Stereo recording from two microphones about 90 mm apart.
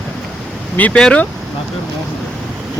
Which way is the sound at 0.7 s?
15° left (ahead or behind).